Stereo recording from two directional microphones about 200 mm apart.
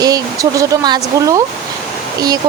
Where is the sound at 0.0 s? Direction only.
15° right (ahead or behind).